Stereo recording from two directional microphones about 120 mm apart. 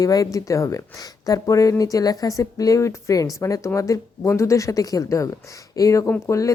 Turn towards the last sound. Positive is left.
turn(degrees=25)  # may be behind; listen again after turning